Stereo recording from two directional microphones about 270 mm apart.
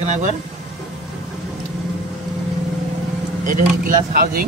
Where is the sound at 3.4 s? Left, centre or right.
Right.